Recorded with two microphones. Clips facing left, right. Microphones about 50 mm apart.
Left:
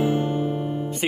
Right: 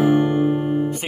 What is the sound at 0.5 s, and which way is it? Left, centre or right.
Music, right.